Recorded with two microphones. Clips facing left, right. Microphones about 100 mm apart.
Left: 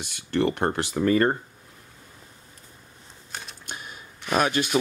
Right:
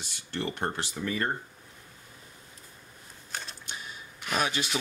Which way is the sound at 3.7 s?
55° left (ahead or behind).